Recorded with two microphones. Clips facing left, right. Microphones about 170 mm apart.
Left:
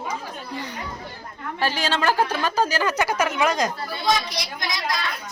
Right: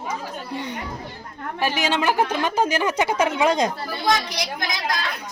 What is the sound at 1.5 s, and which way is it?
A woman's voice, 15° right (ahead or behind).